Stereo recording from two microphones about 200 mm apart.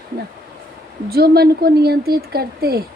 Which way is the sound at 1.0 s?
50° right (ahead or behind).